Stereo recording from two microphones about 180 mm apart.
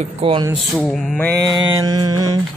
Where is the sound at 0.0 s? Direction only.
30° right (ahead or behind).